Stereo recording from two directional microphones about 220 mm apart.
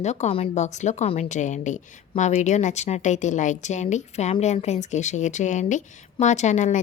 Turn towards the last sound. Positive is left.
turn(degrees=35)  # may be behind; listen again after turning